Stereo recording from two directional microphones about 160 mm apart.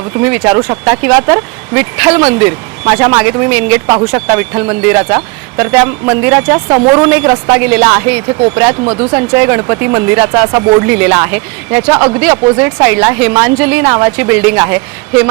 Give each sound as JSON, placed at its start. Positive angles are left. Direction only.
{"t": 0.1, "sound": "speech", "side_deg": -10}